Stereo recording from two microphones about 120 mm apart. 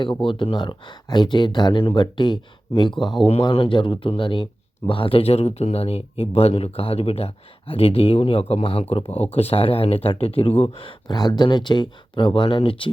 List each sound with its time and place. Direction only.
0.3 s speech: 45° left (ahead or behind)
11.1 s speech: 35° left (ahead or behind)